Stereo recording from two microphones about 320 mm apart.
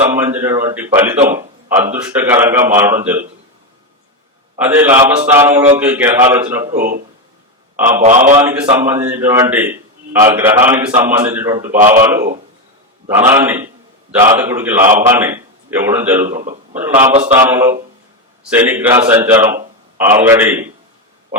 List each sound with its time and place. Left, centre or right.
0.0 s a man's voice: centre
4.5 s a man's voice: centre
7.8 s a man's voice: centre
8.0 s a man's voice: right
8.4 s a man's voice: centre
13.1 s a man's voice: centre
16.3 s a man's voice: right
16.7 s a man's voice: centre